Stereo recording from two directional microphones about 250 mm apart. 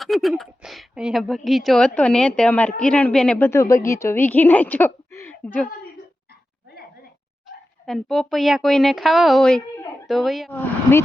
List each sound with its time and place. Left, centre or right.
0.0 s a woman's voice: centre
6.7 s a sound: left
7.9 s a woman's voice: centre